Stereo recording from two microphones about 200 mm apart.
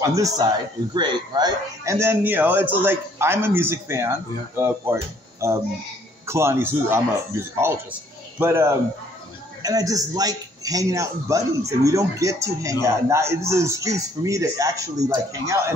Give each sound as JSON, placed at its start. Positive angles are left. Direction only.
{"t": 0.0, "sound": "speech", "side_deg": -15}